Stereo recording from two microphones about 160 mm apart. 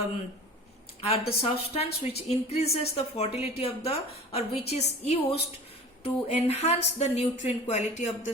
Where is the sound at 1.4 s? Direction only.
35° left (ahead or behind).